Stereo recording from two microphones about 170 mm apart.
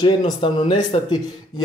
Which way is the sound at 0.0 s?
30° left (ahead or behind).